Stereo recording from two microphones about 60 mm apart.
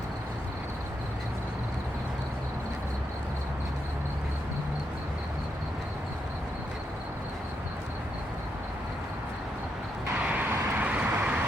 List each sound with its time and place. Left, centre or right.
10.2 s vehicle: right